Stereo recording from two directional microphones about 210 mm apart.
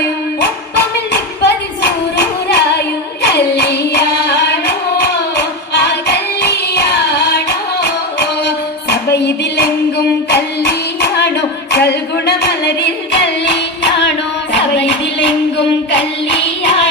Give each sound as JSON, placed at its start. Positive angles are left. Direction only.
{"t": 1.1, "sound": "singing", "side_deg": 55}
{"t": 3.2, "sound": "music", "side_deg": 50}